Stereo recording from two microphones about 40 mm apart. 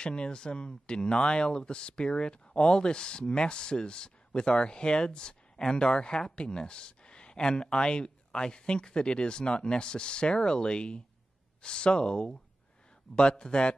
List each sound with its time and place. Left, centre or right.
0.0 s speech: left